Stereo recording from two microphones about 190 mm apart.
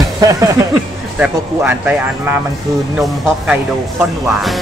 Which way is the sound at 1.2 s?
10° right (ahead or behind).